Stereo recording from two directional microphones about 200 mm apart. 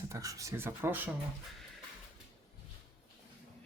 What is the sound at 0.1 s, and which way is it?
Speech, 15° right (ahead or behind).